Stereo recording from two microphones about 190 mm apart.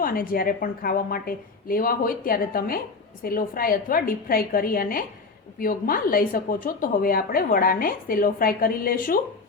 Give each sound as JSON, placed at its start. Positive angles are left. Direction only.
{"t": 0.0, "sound": "a woman's voice", "side_deg": 50}